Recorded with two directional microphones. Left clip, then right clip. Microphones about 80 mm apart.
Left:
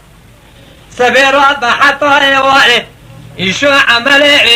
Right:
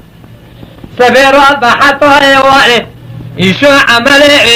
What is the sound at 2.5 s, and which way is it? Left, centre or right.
Speech, left.